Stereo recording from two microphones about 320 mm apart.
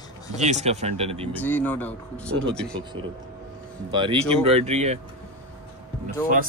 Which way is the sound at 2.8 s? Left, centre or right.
Centre.